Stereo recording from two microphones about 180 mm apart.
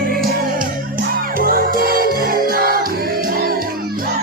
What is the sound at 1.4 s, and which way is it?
Music, 55° right (ahead or behind).